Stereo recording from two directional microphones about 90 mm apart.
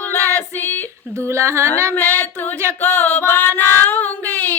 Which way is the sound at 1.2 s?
30° right (ahead or behind).